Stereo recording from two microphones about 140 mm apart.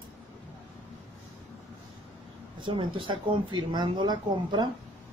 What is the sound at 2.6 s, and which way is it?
Speech, 35° right (ahead or behind).